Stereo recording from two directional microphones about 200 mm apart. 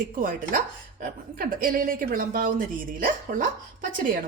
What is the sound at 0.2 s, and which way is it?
A woman's voice, 45° right (ahead or behind).